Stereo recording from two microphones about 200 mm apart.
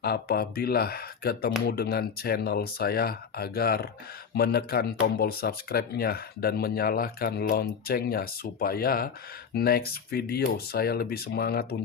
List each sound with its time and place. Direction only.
0.0 s speech: 50° left (ahead or behind)